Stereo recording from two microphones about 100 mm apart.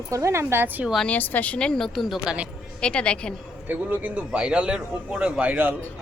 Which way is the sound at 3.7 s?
15° right (ahead or behind).